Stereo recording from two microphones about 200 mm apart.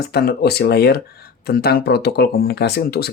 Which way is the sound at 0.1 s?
50° left (ahead or behind).